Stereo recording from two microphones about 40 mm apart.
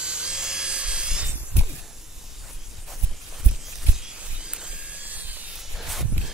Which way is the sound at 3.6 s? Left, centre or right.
Centre.